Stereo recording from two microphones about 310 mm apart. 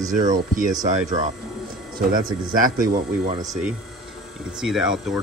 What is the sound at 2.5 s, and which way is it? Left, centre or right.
Speech, right.